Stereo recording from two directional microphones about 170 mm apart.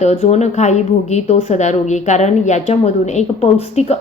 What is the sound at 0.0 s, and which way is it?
A woman's voice, 40° left (ahead or behind).